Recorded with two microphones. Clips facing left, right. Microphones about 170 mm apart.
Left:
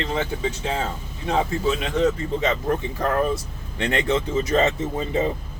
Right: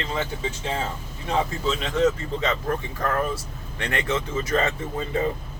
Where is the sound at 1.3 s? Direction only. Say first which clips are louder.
Left 2 dB; 15° left (ahead or behind).